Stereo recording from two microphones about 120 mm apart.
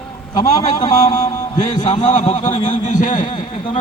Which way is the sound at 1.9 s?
90° left.